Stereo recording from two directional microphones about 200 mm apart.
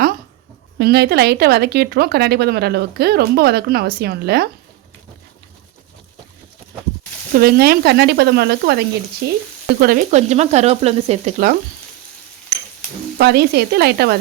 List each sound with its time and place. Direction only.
0.8 s speech: 55° right (ahead or behind)
7.3 s speech: 50° right (ahead or behind)
9.8 s frying: 40° right (ahead or behind)
13.1 s speech: 55° right (ahead or behind)